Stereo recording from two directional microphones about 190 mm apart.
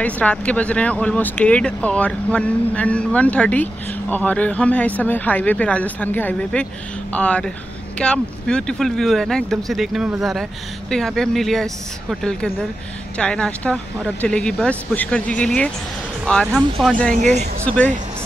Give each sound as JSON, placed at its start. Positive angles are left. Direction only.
{"t": 0.0, "sound": "speech", "side_deg": 5}
{"t": 17.1, "sound": "speech", "side_deg": -40}
{"t": 17.6, "sound": "speech", "side_deg": 5}